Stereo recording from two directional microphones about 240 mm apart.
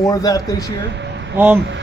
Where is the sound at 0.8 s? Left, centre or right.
Right.